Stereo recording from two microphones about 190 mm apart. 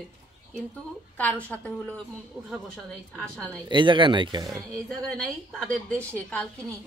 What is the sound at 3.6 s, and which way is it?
Speech, 25° right (ahead or behind).